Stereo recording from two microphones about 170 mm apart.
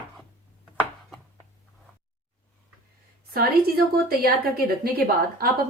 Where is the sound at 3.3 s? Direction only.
60° right (ahead or behind).